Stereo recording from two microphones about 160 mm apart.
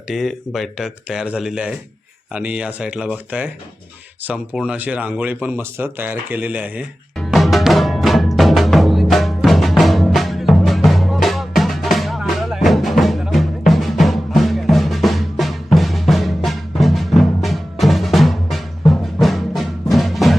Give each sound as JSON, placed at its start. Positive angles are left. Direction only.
{"t": 0.1, "sound": "speech", "side_deg": 0}
{"t": 7.2, "sound": "music", "side_deg": 0}